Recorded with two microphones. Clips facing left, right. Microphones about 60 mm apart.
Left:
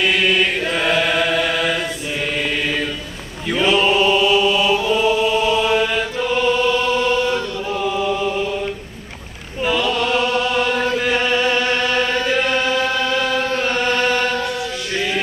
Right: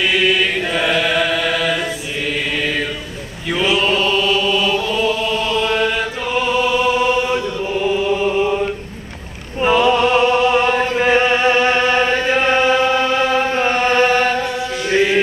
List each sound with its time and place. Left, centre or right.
0.0 s mantra: centre
3.4 s chant: centre
9.7 s chant: right